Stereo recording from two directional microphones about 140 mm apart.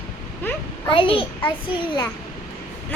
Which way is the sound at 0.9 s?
40° left (ahead or behind).